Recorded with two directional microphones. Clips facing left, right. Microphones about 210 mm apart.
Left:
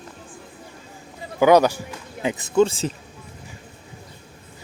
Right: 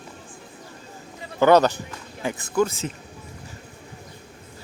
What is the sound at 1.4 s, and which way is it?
A man's voice, 10° left (ahead or behind).